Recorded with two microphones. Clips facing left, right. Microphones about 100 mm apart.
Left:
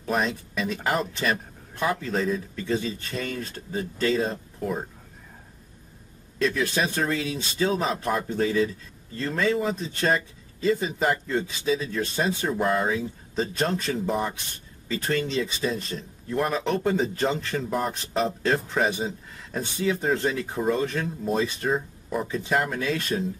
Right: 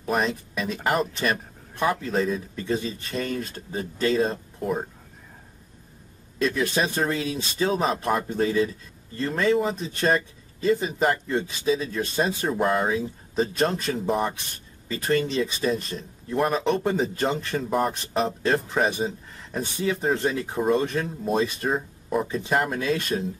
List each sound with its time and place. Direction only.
0.1 s speech: 5° right (ahead or behind)
6.3 s a man's voice: 10° right (ahead or behind)
7.1 s speech: 20° right (ahead or behind)
7.7 s speech: centre (ahead or behind)